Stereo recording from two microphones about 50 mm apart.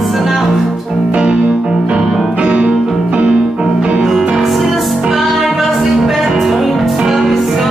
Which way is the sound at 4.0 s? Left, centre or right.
Centre.